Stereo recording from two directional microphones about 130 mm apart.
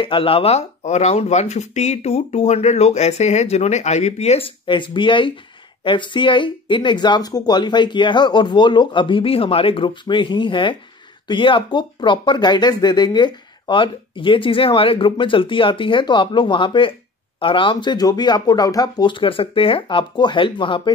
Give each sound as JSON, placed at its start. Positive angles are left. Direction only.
{"t": 0.0, "sound": "speech", "side_deg": 45}
{"t": 4.6, "sound": "speech", "side_deg": 40}